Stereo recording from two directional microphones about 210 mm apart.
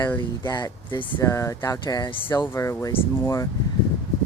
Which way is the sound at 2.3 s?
10° left (ahead or behind).